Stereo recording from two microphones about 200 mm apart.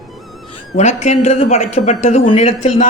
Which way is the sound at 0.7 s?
35° left (ahead or behind).